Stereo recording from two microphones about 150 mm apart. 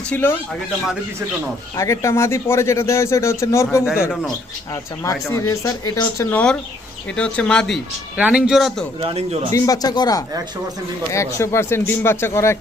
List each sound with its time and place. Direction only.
0.1 s speech: 15° left (ahead or behind)
1.7 s speech: 20° left (ahead or behind)
5.0 s speech: 20° left (ahead or behind)
6.3 s speech: 5° left (ahead or behind)
8.1 s speech: 5° right (ahead or behind)
9.0 s speech: 40° right (ahead or behind)
9.5 s speech: 25° left (ahead or behind)